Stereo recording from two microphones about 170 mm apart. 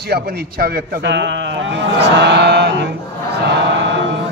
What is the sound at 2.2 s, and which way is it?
Mantra, 90° right.